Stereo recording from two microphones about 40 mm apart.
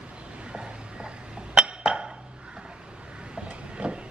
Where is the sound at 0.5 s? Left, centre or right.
Centre.